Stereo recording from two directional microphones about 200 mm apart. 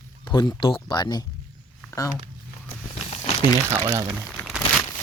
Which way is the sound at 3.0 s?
25° left (ahead or behind).